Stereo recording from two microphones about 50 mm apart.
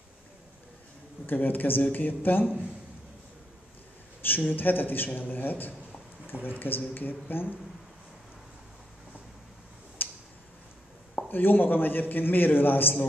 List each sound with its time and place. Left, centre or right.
1.2 s speech: left
4.4 s speech: left
10.0 s tick-tock: left
11.1 s speech: left